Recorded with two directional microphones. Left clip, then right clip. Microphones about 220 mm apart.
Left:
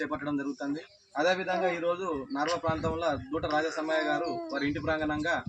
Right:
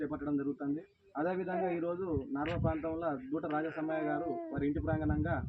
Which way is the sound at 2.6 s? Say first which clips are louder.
Left 6 dB; 45° left (ahead or behind).